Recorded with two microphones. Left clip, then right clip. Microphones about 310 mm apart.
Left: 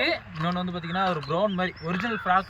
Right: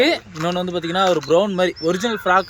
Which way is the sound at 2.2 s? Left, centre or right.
Right.